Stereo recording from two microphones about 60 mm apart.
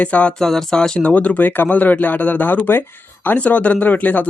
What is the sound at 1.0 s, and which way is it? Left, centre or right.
Speech, left.